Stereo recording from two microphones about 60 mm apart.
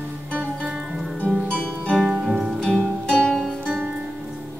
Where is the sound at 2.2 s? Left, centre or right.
Centre.